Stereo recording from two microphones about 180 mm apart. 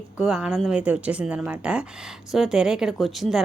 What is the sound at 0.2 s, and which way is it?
A woman's voice, 5° right (ahead or behind).